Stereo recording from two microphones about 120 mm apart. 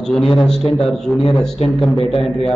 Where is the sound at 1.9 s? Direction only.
55° left (ahead or behind).